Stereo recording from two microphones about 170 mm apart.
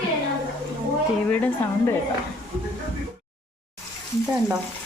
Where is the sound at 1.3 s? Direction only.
10° left (ahead or behind).